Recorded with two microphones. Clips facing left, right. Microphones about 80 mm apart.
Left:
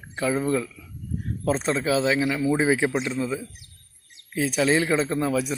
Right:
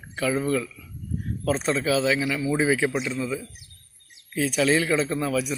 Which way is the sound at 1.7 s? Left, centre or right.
Left.